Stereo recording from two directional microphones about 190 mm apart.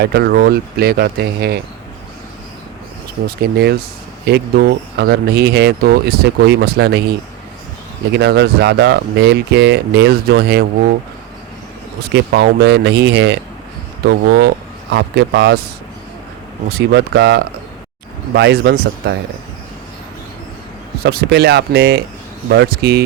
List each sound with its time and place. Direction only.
0.0 s speech: 60° right (ahead or behind)
3.2 s speech: 55° right (ahead or behind)
12.1 s speech: 65° right (ahead or behind)
16.6 s speech: 55° right (ahead or behind)
21.0 s speech: 55° right (ahead or behind)